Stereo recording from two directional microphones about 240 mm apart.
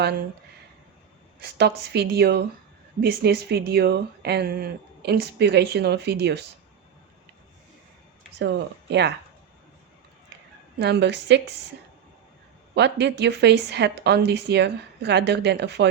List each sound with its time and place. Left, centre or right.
1.4 s speech: right
8.4 s speech: right
10.8 s speech: right
12.7 s speech: right